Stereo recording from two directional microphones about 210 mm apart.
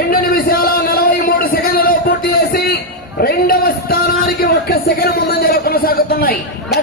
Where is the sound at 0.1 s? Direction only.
45° left (ahead or behind).